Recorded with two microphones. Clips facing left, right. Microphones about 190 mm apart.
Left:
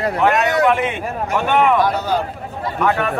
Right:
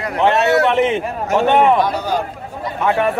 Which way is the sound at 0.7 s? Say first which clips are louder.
Right 4 dB; 25° right (ahead or behind).